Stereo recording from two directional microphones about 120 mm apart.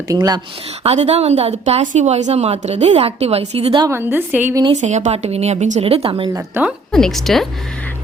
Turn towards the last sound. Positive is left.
turn(degrees=0)  # may be behind; listen again after turning